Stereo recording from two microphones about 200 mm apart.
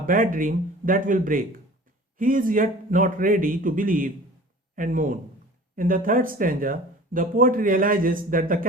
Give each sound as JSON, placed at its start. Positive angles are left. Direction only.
{"t": 0.0, "sound": "speech", "side_deg": -45}